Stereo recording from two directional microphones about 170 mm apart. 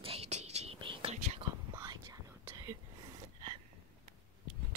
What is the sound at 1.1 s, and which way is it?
Whispering, 45° right (ahead or behind).